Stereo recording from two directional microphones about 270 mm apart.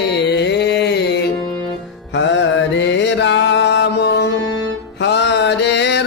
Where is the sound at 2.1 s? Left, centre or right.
Left.